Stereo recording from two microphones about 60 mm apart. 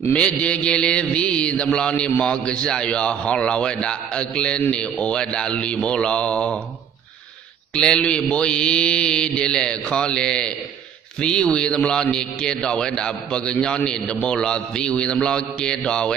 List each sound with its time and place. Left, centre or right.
0.1 s mantra: centre
7.7 s mantra: centre